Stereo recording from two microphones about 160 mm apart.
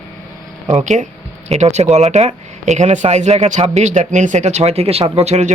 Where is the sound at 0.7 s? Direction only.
50° right (ahead or behind).